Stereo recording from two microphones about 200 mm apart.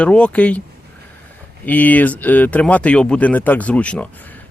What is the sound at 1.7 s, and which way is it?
Speech, 10° left (ahead or behind).